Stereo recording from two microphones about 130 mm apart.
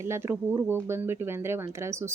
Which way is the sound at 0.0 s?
20° right (ahead or behind).